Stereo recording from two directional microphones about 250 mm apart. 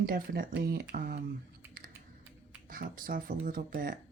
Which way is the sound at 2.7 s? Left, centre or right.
Right.